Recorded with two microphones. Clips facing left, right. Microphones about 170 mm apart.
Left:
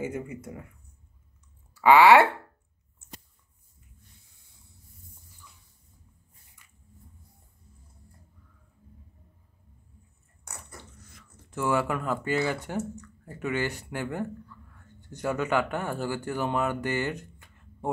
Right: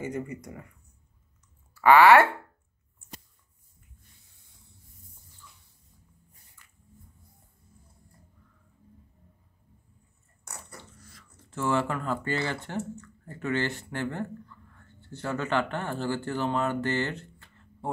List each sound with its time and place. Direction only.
0.0 s speech: 5° left (ahead or behind)
1.8 s speech: 15° left (ahead or behind)
10.8 s a sound: 20° left (ahead or behind)
12.6 s speech: 10° left (ahead or behind)